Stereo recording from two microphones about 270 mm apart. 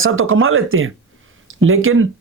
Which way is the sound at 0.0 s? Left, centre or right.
Right.